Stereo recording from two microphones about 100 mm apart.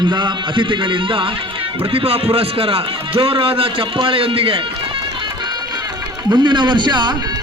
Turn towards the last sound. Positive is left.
turn(degrees=-50)  # may be behind; listen again after turning